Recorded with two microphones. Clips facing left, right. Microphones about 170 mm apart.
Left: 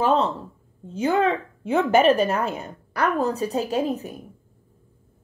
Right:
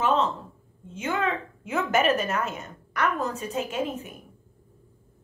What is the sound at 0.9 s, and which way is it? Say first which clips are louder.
A woman's voice: left 7 dB; 35° left (ahead or behind).